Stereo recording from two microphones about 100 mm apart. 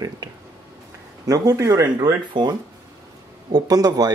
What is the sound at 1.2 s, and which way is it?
Speech, 35° right (ahead or behind).